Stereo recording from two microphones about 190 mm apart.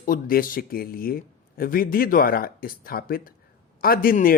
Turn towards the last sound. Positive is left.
turn(degrees=50)  # may be behind; listen again after turning